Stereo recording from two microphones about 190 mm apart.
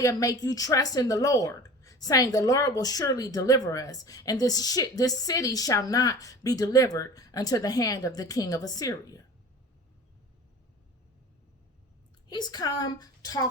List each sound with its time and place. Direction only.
0.0 s a woman's voice: 15° left (ahead or behind)
12.3 s a woman's voice: 20° left (ahead or behind)